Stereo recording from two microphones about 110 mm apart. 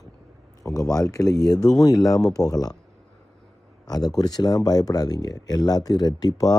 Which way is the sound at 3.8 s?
35° left (ahead or behind).